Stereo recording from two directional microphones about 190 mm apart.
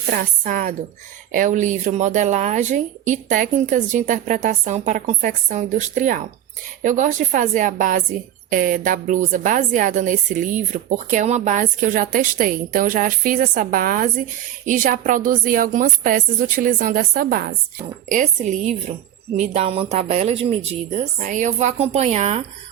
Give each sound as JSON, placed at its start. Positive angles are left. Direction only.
{"t": 0.1, "sound": "a woman's voice", "side_deg": -45}
{"t": 18.1, "sound": "speech", "side_deg": -40}